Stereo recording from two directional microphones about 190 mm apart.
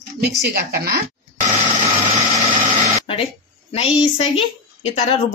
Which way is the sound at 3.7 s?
30° left (ahead or behind).